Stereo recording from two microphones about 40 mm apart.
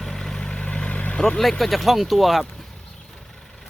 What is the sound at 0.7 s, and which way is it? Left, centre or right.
Vehicle, left.